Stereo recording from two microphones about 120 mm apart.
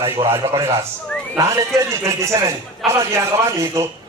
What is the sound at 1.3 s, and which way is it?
A man's voice, 25° right (ahead or behind).